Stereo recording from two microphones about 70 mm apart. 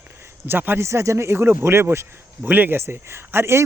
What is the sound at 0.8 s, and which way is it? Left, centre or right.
Speech, right.